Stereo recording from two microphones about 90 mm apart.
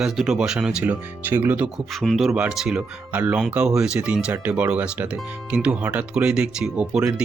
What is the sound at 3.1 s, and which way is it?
Speech, 15° right (ahead or behind).